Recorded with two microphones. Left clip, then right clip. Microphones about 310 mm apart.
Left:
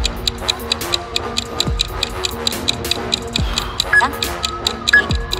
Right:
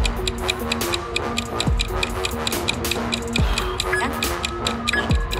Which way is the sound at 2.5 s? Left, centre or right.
Centre.